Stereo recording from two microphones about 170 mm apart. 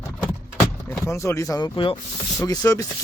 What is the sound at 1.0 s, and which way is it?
Speech, 15° left (ahead or behind).